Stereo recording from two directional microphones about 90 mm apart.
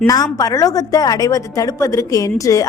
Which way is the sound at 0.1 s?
45° left (ahead or behind).